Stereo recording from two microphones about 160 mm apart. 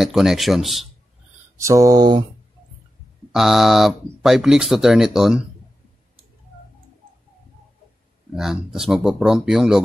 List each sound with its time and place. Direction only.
0.0 s speech: 5° right (ahead or behind)
1.6 s mantra: 20° right (ahead or behind)
3.3 s speech: centre (ahead or behind)
8.4 s speech: 5° right (ahead or behind)